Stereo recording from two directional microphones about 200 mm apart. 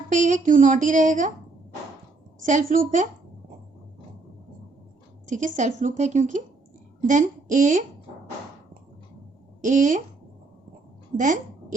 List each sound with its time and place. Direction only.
0.1 s speech: 40° right (ahead or behind)
2.4 s speech: 40° right (ahead or behind)
5.2 s a sound: 40° right (ahead or behind)
5.5 s speech: 35° right (ahead or behind)
9.6 s speech: 40° right (ahead or behind)